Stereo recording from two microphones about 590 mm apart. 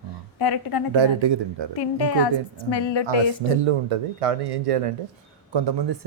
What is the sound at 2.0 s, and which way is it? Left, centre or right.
A woman's voice, left.